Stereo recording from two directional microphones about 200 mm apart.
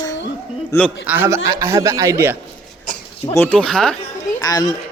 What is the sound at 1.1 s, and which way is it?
A man's voice, 10° right (ahead or behind).